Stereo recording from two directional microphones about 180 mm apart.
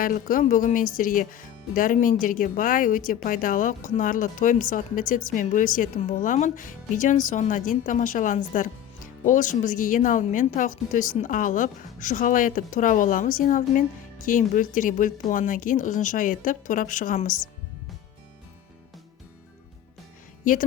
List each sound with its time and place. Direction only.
0.0 s speech: 50° left (ahead or behind)
20.4 s a woman's voice: 45° left (ahead or behind)